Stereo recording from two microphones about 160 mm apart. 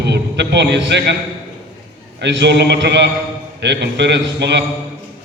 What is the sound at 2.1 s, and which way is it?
A man's voice, 90° right.